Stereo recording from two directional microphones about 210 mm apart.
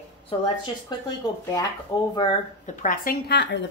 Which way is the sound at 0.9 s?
20° left (ahead or behind).